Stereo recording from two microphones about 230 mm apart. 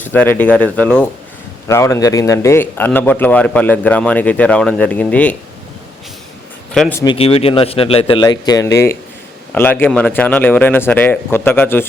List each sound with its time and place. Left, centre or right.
0.0 s speech: centre
6.9 s a man's voice: centre